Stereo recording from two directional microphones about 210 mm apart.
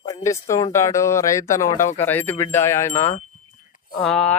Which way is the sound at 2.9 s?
35° left (ahead or behind).